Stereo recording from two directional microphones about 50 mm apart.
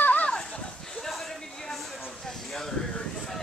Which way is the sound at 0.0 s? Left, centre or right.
Left.